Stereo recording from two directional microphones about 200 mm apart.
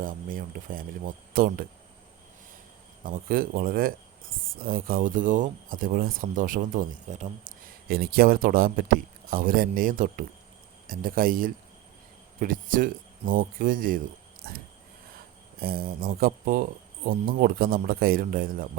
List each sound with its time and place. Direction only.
0.0 s speech: 45° right (ahead or behind)
3.0 s speech: 45° right (ahead or behind)
14.4 s a sound: 45° right (ahead or behind)
15.6 s speech: 50° right (ahead or behind)